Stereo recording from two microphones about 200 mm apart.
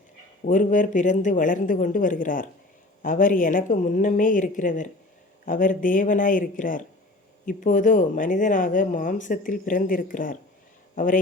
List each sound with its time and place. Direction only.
0.4 s speech: 40° left (ahead or behind)